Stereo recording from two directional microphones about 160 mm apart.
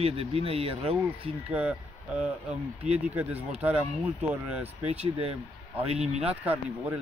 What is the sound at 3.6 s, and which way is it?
Speech, 10° right (ahead or behind).